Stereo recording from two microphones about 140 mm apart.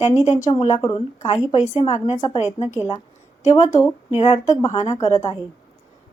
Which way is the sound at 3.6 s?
25° left (ahead or behind).